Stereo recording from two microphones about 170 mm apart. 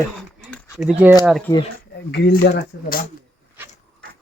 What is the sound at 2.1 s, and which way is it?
Speech, 85° left.